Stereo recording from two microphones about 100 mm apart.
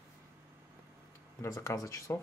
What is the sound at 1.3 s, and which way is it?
Speech, 30° left (ahead or behind).